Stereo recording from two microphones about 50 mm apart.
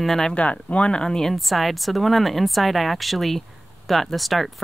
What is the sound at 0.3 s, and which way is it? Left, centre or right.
Speech, left.